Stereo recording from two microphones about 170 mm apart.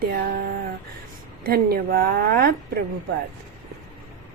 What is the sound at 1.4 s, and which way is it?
A woman's voice, 65° right (ahead or behind).